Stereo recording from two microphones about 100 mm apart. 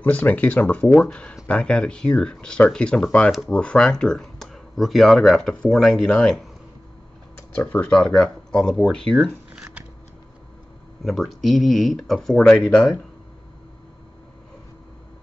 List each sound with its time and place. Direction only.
0.0 s speech: 15° left (ahead or behind)
7.5 s speech: 15° left (ahead or behind)
11.1 s speech: centre (ahead or behind)